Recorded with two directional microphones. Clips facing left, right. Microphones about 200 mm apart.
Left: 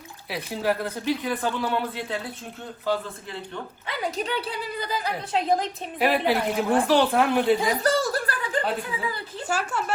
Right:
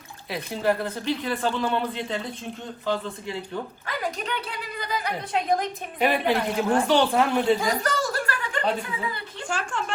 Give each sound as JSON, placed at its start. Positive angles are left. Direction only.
{"t": 0.3, "sound": "speech", "side_deg": 5}
{"t": 4.0, "sound": "a woman's voice", "side_deg": 30}
{"t": 6.0, "sound": "speech", "side_deg": 5}
{"t": 7.8, "sound": "a sound", "side_deg": 30}
{"t": 9.5, "sound": "speech", "side_deg": 5}